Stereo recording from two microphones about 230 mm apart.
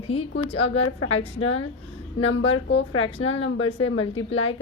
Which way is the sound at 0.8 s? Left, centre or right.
Left.